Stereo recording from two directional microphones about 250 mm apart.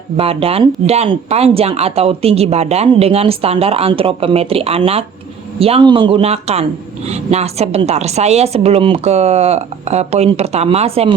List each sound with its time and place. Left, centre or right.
0.2 s speech: right